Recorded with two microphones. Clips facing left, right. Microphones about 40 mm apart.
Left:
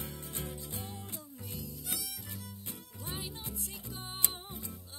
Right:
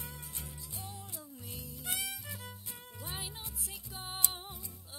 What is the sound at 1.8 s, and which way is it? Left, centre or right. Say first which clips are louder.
Music: right 8 dB; right.